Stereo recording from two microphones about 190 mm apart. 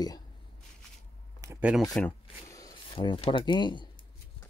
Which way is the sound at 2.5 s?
20° left (ahead or behind).